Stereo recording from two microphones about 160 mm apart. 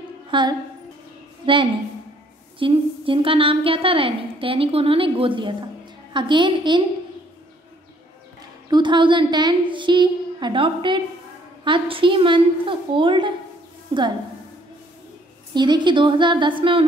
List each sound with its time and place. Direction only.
0.3 s a woman's voice: 30° right (ahead or behind)
8.6 s a woman's voice: 30° right (ahead or behind)
15.5 s a woman's voice: 30° right (ahead or behind)